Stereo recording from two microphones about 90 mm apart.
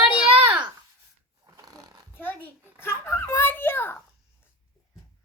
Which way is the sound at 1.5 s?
45° right (ahead or behind).